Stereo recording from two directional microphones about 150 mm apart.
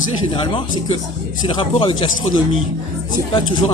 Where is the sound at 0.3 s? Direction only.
35° left (ahead or behind).